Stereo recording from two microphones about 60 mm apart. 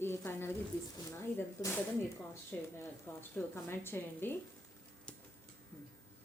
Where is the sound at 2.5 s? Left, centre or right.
Left.